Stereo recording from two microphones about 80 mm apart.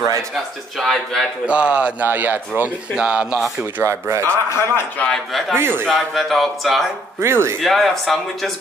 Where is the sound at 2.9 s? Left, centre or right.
Centre.